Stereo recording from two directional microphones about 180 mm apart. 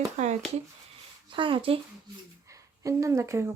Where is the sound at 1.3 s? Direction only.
30° right (ahead or behind).